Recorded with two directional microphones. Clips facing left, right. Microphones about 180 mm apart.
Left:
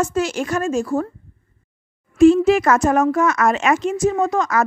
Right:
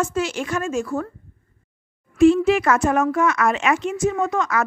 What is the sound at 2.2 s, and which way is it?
Speech, 40° left (ahead or behind).